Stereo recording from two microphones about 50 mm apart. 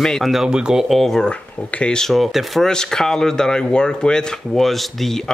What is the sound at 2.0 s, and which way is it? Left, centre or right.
Speech, centre.